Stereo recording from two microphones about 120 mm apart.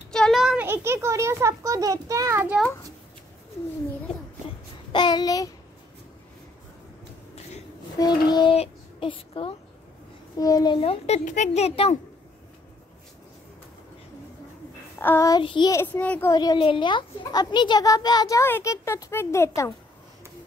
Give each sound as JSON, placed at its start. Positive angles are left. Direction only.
{"t": 0.1, "sound": "a sound", "side_deg": 5}
{"t": 0.6, "sound": "a child's voice", "side_deg": -20}
{"t": 4.9, "sound": "a child's voice", "side_deg": 35}
{"t": 8.0, "sound": "a child's voice", "side_deg": 35}
{"t": 8.5, "sound": "child singing", "side_deg": 45}
{"t": 10.4, "sound": "a child's voice", "side_deg": 35}
{"t": 10.8, "sound": "speech", "side_deg": 60}
{"t": 15.0, "sound": "a child's voice", "side_deg": 20}
{"t": 15.4, "sound": "a child's voice", "side_deg": 40}
{"t": 15.7, "sound": "a child's voice", "side_deg": 15}
{"t": 16.3, "sound": "a child's voice", "side_deg": 30}
{"t": 16.5, "sound": "a child's voice", "side_deg": 45}